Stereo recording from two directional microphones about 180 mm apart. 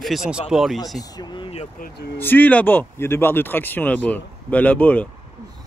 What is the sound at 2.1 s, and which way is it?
Speech, 10° left (ahead or behind).